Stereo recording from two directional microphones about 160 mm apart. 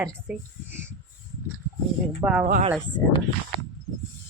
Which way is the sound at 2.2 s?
20° right (ahead or behind).